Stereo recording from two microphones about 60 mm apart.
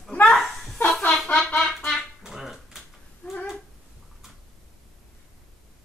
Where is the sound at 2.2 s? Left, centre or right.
Centre.